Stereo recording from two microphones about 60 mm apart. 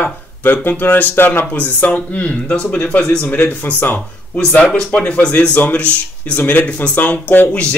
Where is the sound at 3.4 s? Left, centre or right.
Left.